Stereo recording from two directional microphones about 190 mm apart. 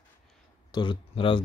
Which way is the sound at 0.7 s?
25° left (ahead or behind).